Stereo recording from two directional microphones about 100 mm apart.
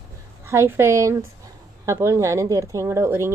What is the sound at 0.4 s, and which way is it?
Speech, 25° right (ahead or behind).